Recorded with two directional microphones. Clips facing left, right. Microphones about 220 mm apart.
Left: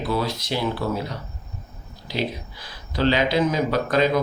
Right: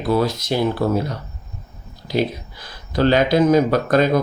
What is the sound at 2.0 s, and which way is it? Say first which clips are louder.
Speech: right 6 dB; 45° right (ahead or behind).